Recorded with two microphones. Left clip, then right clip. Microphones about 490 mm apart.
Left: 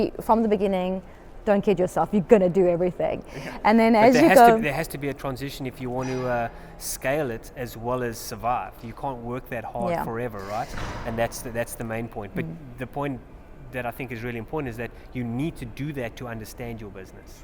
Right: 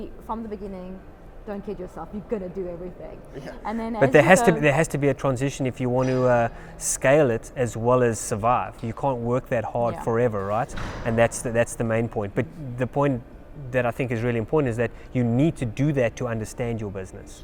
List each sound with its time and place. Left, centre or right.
0.0 s a woman's voice: left
4.1 s speech: right